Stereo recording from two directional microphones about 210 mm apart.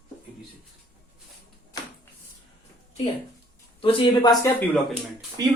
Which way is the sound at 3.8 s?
20° left (ahead or behind).